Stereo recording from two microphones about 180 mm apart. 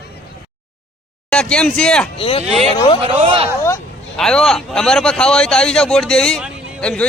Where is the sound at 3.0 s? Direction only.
30° right (ahead or behind).